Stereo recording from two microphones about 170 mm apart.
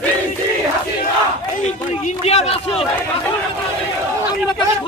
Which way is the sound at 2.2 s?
40° left (ahead or behind).